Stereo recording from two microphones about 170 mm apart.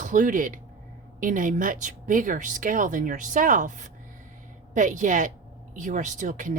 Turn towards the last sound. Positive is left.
turn(degrees=-50)  # may be behind; listen again after turning